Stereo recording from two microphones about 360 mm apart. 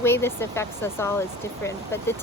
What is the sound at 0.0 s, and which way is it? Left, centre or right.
Speech, centre.